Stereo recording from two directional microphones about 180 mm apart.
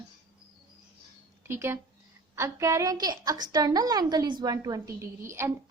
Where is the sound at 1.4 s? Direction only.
15° right (ahead or behind).